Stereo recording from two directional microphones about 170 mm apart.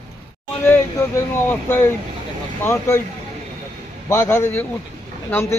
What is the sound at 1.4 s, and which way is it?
A man's voice, 15° left (ahead or behind).